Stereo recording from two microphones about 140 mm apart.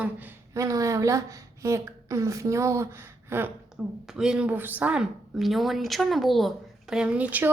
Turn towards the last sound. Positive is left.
turn(degrees=-10)  # may be behind; listen again after turning